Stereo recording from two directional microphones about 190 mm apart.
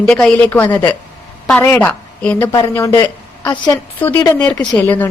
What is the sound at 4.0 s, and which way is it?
A man's voice, 10° left (ahead or behind).